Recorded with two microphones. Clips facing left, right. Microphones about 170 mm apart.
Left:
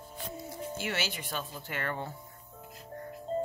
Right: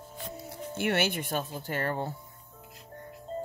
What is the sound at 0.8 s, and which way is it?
Speech, 60° right (ahead or behind).